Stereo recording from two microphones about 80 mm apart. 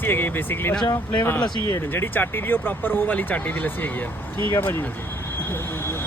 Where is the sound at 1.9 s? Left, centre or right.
Left.